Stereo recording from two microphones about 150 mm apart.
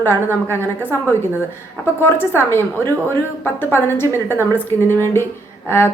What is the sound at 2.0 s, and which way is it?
A woman's voice, 15° left (ahead or behind).